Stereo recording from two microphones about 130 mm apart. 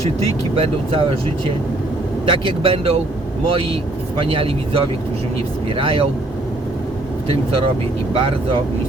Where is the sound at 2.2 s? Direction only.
45° right (ahead or behind).